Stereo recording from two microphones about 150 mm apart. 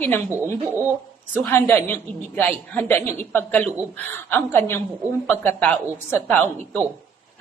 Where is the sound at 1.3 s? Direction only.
15° left (ahead or behind).